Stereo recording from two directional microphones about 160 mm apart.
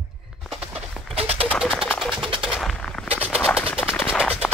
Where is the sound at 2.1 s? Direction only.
35° right (ahead or behind).